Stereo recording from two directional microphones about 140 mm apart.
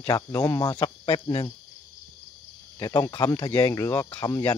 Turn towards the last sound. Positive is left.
turn(degrees=25)  # may be behind; listen again after turning